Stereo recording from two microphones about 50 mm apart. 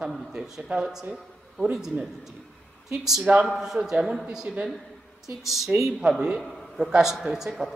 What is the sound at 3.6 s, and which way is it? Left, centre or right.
Speech, centre.